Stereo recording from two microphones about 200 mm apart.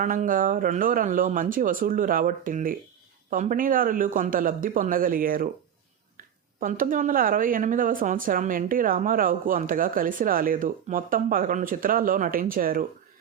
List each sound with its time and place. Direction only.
0.0 s speech: 40° right (ahead or behind)